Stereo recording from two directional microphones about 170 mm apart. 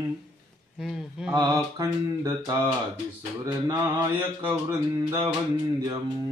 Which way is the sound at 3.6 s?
20° right (ahead or behind).